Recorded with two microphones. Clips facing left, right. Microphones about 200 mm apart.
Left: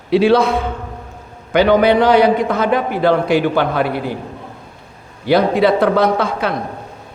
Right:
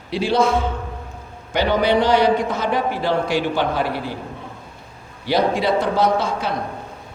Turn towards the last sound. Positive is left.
turn(degrees=60)  # may be behind; listen again after turning